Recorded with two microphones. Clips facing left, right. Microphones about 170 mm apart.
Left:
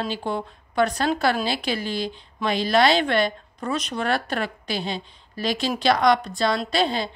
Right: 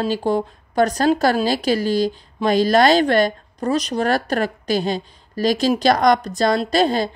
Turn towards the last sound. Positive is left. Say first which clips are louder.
# right 6 dB
turn(degrees=-45)  # may be behind; listen again after turning